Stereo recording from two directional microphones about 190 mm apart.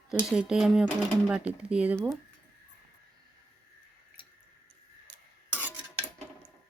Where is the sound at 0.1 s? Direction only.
Centre (ahead or behind).